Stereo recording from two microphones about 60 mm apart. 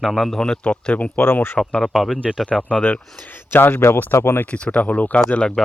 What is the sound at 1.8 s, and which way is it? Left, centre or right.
Speech, centre.